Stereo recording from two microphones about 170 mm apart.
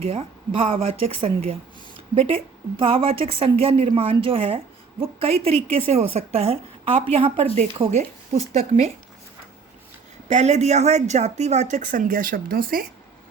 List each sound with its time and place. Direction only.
0.1 s speech: 30° right (ahead or behind)
2.1 s speech: 35° right (ahead or behind)
10.2 s speech: 40° right (ahead or behind); by 12.8 s 60° right (ahead or behind)